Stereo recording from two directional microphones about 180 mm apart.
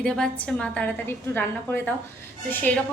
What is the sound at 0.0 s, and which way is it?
A woman's voice, 5° left (ahead or behind).